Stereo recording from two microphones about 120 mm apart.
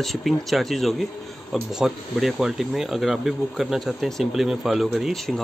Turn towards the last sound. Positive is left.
turn(degrees=0)  # may be behind; listen again after turning